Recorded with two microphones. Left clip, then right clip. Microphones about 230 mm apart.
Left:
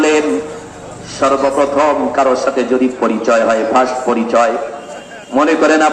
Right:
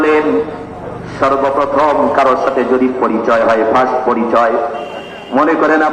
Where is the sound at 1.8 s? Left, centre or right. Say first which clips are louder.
Right 3 dB; left.